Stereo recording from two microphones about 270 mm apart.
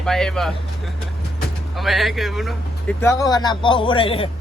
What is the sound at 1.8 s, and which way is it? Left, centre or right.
Speech, centre.